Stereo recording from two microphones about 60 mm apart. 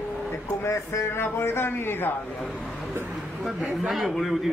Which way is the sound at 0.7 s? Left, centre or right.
Left.